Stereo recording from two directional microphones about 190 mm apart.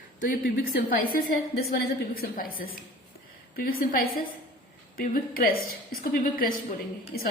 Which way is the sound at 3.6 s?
50° left (ahead or behind).